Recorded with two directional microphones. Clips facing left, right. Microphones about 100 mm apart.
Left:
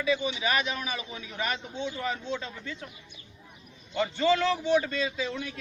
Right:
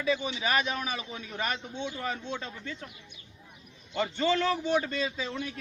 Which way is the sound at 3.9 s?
40° right (ahead or behind).